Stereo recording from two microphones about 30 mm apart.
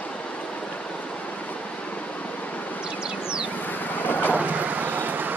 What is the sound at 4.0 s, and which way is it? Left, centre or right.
Vehicle, left.